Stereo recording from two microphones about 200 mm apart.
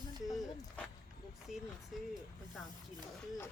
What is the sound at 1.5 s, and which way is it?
Speech, centre (ahead or behind).